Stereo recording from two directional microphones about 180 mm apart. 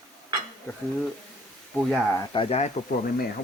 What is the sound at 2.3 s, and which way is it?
Speech, 35° left (ahead or behind).